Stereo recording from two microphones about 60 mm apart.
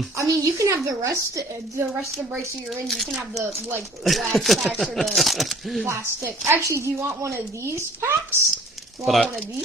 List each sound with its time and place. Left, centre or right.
0.2 s a woman's voice: right
2.9 s speech: centre
5.9 s a woman's voice: right
9.0 s speech: centre